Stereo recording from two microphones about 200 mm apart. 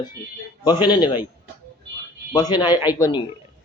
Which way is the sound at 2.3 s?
20° left (ahead or behind).